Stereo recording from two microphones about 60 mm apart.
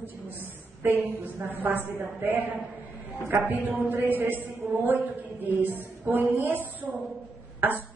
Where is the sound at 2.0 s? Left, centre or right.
Right.